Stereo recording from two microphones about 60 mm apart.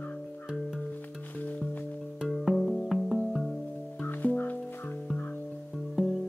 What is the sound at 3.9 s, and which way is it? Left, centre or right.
Music, left.